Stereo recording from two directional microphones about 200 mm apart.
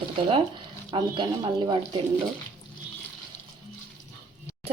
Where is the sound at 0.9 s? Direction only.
25° right (ahead or behind).